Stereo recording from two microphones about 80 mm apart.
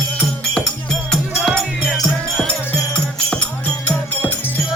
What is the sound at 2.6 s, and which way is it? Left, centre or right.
Music, left.